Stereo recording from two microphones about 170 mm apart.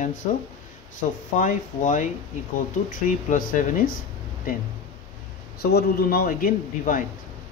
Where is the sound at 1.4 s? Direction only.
50° left (ahead or behind).